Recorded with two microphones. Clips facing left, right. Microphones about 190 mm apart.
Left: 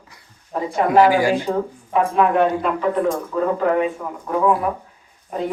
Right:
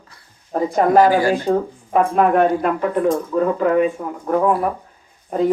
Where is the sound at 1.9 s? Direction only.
45° right (ahead or behind).